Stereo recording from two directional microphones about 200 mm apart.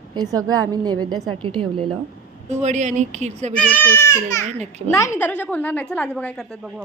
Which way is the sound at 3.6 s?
10° left (ahead or behind).